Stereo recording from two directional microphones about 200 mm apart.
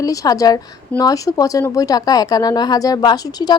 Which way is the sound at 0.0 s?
15° left (ahead or behind).